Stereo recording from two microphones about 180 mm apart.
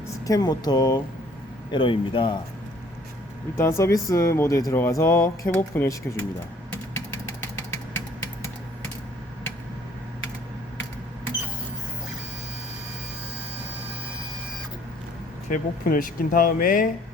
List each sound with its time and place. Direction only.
0.3 s speech: 20° left (ahead or behind)
3.6 s speech: 15° left (ahead or behind)
6.9 s vehicle: 15° left (ahead or behind)
15.4 s speech: 50° left (ahead or behind)